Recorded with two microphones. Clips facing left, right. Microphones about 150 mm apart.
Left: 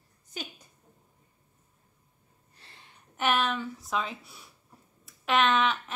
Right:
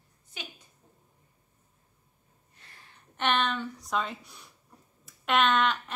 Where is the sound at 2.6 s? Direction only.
30° left (ahead or behind).